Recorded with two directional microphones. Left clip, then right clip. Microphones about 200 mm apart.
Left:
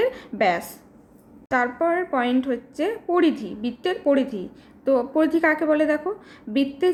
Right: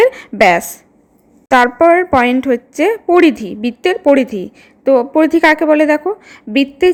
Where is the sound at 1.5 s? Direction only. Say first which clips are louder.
Right 13 dB; 40° right (ahead or behind).